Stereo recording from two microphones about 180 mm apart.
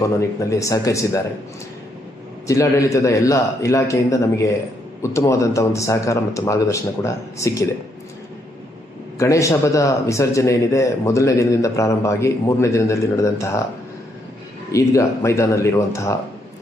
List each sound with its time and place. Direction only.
0.0 s speech: 15° left (ahead or behind)
2.5 s speech: 15° left (ahead or behind)
9.1 s speech: 15° left (ahead or behind)
14.7 s speech: 15° left (ahead or behind)